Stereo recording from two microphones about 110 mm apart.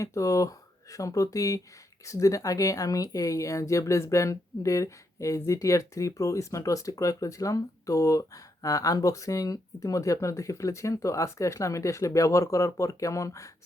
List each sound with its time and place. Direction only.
0.0 s speech: 30° left (ahead or behind)